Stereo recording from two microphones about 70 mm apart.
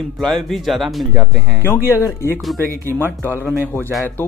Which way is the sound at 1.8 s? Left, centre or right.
Right.